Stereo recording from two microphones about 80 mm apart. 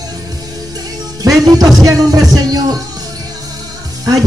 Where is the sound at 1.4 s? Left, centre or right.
Right.